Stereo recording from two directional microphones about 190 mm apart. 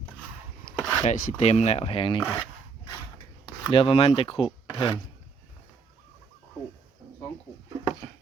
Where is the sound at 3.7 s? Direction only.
30° left (ahead or behind).